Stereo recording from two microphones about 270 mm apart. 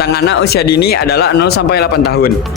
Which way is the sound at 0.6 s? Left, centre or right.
Left.